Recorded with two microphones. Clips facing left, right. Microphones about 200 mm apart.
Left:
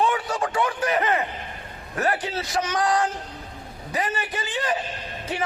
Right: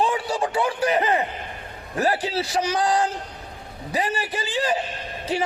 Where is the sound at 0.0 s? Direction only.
30° right (ahead or behind).